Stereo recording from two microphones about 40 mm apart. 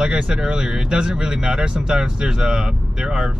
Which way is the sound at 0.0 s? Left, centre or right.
Centre.